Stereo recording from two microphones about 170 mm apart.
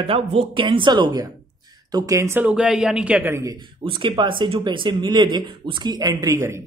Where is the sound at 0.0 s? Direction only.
35° right (ahead or behind); by 3.5 s 15° right (ahead or behind).